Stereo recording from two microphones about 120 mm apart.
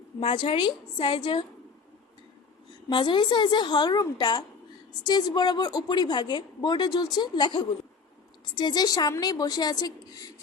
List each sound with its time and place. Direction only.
0.2 s a woman's voice: 45° left (ahead or behind)
2.9 s a woman's voice: 40° left (ahead or behind)